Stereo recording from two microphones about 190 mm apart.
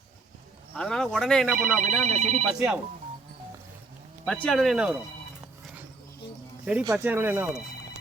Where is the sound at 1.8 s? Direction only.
35° right (ahead or behind).